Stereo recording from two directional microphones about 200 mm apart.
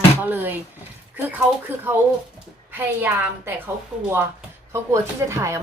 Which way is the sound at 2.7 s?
10° right (ahead or behind).